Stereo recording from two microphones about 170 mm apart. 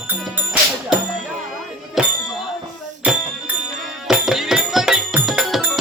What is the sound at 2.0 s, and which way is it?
Music, 5° right (ahead or behind).